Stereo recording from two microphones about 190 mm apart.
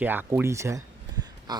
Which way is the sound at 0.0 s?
10° right (ahead or behind).